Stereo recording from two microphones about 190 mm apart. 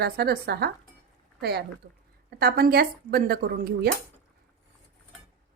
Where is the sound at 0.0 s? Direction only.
55° right (ahead or behind).